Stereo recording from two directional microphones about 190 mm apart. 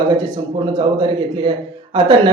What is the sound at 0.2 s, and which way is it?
Speech, 25° right (ahead or behind).